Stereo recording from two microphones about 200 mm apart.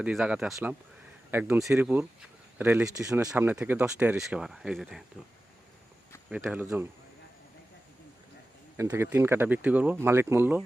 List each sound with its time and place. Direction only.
0.0 s speech: 5° right (ahead or behind)
6.3 s speech: 10° right (ahead or behind)
8.7 s speech: 10° right (ahead or behind)